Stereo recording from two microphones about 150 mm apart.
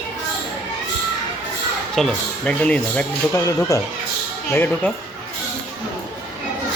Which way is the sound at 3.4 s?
20° left (ahead or behind).